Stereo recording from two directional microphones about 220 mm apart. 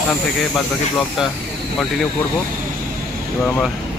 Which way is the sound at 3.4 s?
5° left (ahead or behind).